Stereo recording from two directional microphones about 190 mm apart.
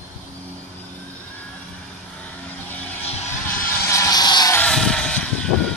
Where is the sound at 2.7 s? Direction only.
10° left (ahead or behind).